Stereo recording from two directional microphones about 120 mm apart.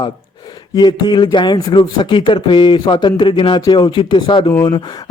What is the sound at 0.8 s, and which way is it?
Speech, 40° left (ahead or behind).